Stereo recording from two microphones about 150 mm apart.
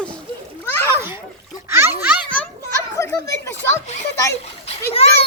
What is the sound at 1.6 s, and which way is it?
Speech, 15° right (ahead or behind).